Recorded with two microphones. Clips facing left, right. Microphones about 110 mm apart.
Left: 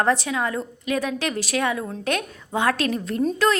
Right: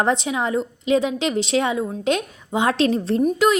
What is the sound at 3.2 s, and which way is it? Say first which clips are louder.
Speech: right 2 dB; 15° right (ahead or behind).